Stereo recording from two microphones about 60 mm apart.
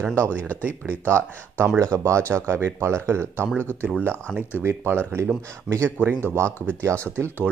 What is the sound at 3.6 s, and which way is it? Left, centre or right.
Speech, left.